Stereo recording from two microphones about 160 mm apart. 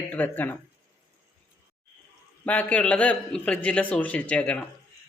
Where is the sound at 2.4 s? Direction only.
10° left (ahead or behind).